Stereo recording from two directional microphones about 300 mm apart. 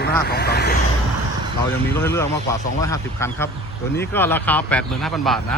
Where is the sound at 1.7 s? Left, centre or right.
Centre.